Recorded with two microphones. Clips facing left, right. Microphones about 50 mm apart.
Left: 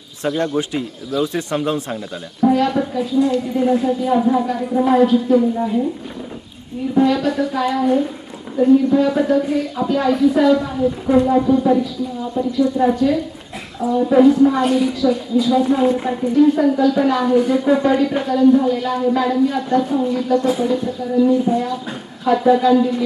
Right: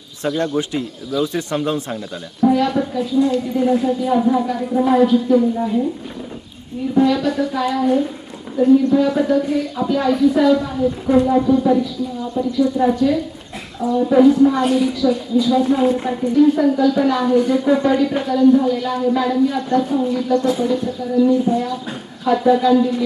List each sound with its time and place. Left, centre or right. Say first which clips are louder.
0.3 s speech: even; centre
6.9 s speech: even; centre